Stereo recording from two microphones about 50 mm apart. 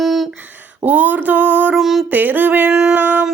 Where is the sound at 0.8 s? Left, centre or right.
Right.